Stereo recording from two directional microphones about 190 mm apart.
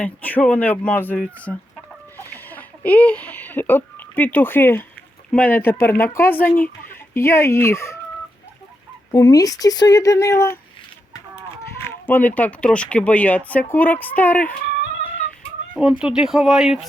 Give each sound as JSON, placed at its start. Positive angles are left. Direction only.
{"t": 0.0, "sound": "speech", "side_deg": 10}
{"t": 2.1, "sound": "a sound", "side_deg": 10}
{"t": 5.3, "sound": "speech", "side_deg": 10}
{"t": 9.1, "sound": "speech", "side_deg": 20}
{"t": 11.9, "sound": "speech", "side_deg": 10}
{"t": 15.8, "sound": "speech", "side_deg": -5}